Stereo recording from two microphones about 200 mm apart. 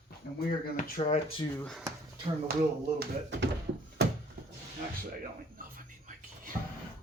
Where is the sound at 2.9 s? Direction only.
65° right (ahead or behind).